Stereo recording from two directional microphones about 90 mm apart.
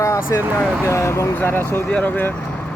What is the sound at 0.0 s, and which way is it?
Vehicle, 30° left (ahead or behind).